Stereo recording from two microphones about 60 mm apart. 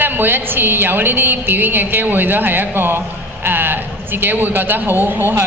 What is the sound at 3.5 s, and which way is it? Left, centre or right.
A man's voice, right.